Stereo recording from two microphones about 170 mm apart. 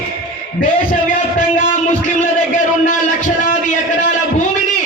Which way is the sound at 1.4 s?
45° left (ahead or behind).